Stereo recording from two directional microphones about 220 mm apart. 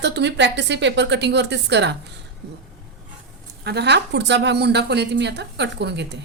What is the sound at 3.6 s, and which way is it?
Speech, 50° right (ahead or behind).